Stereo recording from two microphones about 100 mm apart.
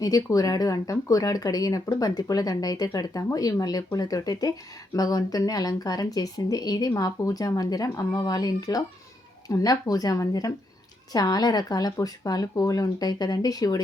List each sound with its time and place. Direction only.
0.0 s speech: 35° left (ahead or behind)